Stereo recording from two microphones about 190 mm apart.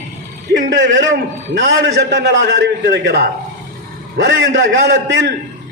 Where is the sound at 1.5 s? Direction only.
70° right (ahead or behind).